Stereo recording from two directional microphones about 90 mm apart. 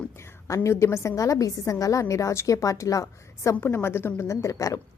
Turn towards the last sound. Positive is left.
turn(degrees=35)  # may be behind; listen again after turning